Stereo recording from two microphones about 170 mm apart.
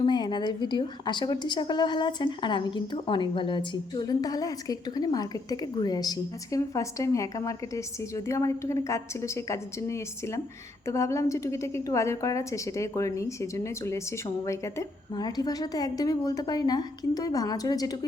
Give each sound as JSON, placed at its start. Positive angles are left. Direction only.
{"t": 0.0, "sound": "a woman's voice", "side_deg": 25}